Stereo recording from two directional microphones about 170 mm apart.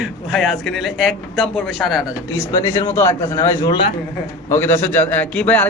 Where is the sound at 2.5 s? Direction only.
20° left (ahead or behind).